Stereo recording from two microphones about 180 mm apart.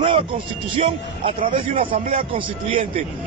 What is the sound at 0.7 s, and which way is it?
A man's voice, 30° right (ahead or behind).